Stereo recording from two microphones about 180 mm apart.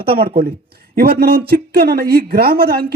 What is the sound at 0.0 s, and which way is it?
A man's voice, 60° right (ahead or behind).